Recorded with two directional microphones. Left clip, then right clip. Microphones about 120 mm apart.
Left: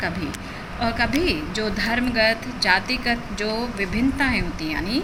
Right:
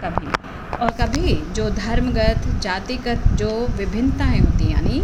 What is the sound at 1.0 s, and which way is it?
A woman's voice, 75° right (ahead or behind).